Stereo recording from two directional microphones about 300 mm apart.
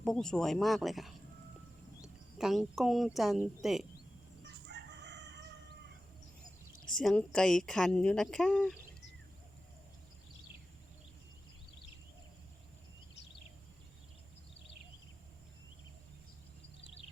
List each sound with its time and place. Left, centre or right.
0.0 s speech: centre
4.6 s chicken: right
6.9 s speech: centre